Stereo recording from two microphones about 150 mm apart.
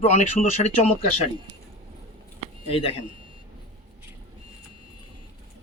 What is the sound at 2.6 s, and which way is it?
Speech, 40° left (ahead or behind).